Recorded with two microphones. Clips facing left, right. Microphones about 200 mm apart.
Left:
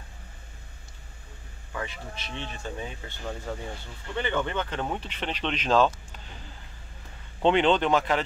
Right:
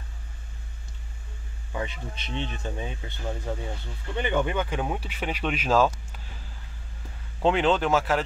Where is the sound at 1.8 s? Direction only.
20° right (ahead or behind).